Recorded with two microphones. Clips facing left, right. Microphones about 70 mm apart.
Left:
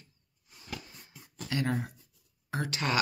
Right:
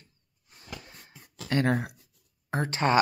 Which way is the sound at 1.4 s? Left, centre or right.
Right.